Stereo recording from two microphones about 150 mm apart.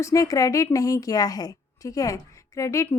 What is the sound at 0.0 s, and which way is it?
Speech, 20° left (ahead or behind).